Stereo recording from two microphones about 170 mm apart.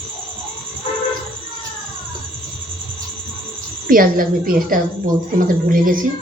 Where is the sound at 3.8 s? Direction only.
55° right (ahead or behind).